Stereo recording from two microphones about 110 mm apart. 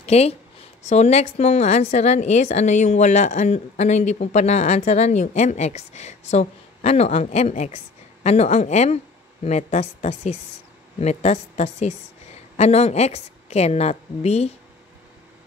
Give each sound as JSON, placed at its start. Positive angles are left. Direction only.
{"t": 0.0, "sound": "speech", "side_deg": 70}
{"t": 0.8, "sound": "a woman's voice", "side_deg": 90}
{"t": 12.5, "sound": "a woman's voice", "side_deg": 75}